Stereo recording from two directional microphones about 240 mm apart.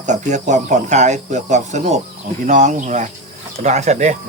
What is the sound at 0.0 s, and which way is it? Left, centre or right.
Speech, right.